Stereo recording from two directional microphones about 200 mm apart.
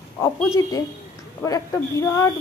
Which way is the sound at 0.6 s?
15° left (ahead or behind).